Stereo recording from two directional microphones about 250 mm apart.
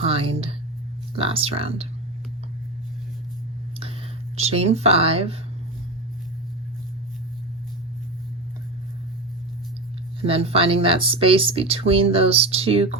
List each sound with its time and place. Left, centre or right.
0.0 s speech: right
4.4 s speech: right
10.2 s speech: right